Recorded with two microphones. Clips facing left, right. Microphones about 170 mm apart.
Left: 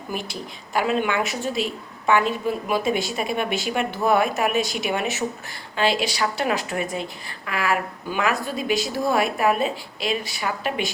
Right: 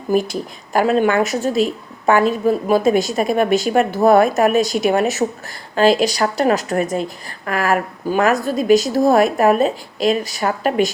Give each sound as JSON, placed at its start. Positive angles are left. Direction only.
{"t": 0.1, "sound": "a woman's voice", "side_deg": -45}